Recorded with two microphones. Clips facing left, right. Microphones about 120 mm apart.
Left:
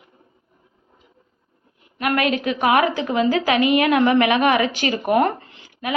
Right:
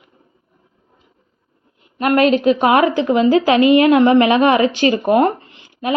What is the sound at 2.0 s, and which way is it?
Speech, 30° right (ahead or behind).